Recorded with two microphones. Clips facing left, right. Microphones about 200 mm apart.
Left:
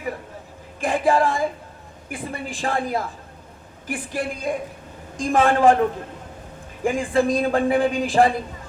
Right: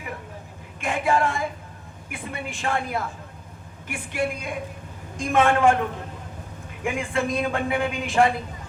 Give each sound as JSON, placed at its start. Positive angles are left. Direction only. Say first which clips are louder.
{"t": 0.8, "sound": "speech", "louder": "left 4 dB", "side_deg": 35}
{"t": 6.8, "sound": "speech", "louder": "left 6 dB", "side_deg": 35}